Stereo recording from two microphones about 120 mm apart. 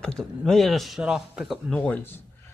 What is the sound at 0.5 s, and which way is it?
Speech, centre (ahead or behind).